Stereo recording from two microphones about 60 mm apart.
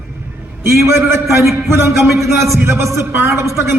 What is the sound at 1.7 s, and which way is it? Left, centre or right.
A man's voice, right.